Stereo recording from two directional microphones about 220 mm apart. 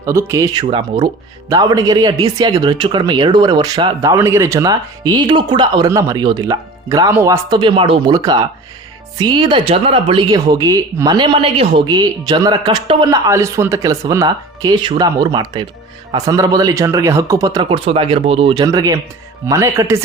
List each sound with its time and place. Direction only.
0.0 s speech: 15° right (ahead or behind)